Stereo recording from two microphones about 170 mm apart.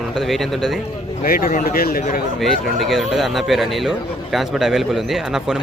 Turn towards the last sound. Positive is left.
turn(degrees=-5)  # may be behind; listen again after turning